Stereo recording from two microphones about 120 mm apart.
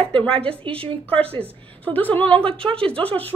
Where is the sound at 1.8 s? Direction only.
15° left (ahead or behind).